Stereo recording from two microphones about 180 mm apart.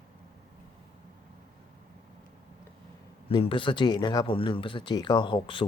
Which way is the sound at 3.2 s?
30° left (ahead or behind).